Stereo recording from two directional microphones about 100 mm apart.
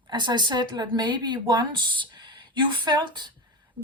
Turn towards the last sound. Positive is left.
turn(degrees=-50)  # may be behind; listen again after turning